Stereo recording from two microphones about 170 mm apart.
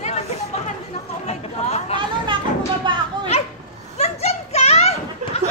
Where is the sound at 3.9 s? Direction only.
40° left (ahead or behind).